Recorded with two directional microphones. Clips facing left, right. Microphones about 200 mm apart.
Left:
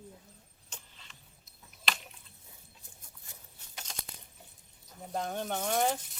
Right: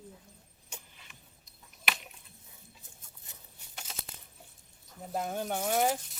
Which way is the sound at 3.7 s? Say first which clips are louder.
Even; 5° right (ahead or behind).